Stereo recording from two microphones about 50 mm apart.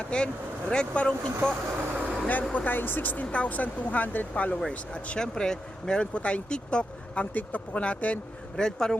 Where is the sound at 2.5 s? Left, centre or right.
Left.